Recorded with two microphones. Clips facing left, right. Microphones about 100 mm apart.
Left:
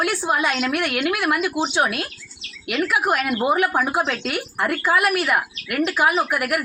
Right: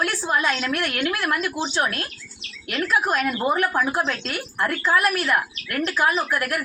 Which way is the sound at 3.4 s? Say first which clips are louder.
Left 3 dB; 10° left (ahead or behind).